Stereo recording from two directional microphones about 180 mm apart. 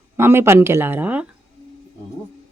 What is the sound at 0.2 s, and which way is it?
Speech, 15° right (ahead or behind).